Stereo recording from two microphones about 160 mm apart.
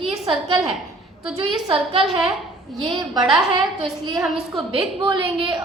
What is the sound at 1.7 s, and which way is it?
A woman's voice, 35° right (ahead or behind).